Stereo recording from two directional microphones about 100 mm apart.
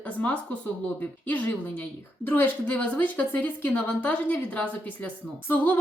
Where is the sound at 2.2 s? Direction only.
20° left (ahead or behind).